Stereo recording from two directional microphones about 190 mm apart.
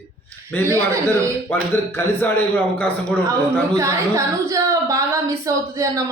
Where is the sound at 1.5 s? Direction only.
10° left (ahead or behind).